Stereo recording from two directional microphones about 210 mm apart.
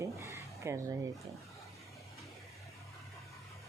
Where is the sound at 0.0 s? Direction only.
15° right (ahead or behind).